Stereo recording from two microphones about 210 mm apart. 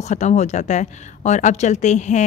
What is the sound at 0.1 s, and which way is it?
A woman's voice, 35° left (ahead or behind).